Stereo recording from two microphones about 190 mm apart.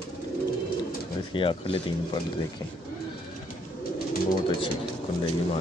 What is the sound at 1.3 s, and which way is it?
Speech, 25° left (ahead or behind).